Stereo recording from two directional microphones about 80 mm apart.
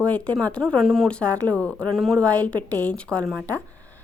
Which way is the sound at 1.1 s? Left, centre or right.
Centre.